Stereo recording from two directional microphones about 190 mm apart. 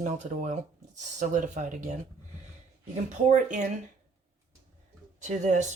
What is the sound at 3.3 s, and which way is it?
Speech, 40° right (ahead or behind).